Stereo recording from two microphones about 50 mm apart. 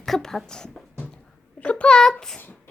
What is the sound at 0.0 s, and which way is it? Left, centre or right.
Speech, centre.